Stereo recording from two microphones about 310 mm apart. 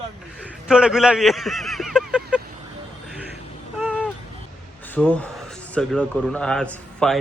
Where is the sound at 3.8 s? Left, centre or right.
Centre.